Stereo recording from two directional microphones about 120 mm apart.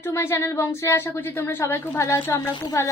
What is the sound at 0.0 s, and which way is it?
A woman's voice, 20° left (ahead or behind).